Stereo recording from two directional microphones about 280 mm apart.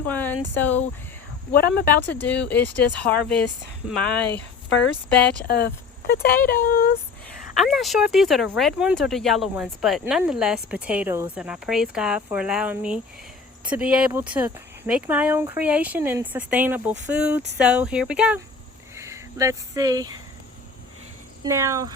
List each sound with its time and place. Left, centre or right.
0.1 s speech: centre
1.5 s speech: left
2.5 s speech: centre
5.5 s speech: left
7.5 s speech: centre
21.4 s speech: centre